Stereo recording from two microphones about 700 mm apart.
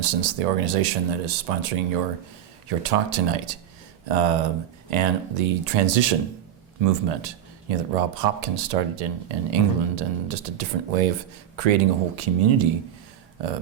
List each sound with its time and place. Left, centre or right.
0.0 s speech: right